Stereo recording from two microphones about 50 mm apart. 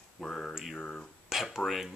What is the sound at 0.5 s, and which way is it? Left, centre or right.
Speech, centre.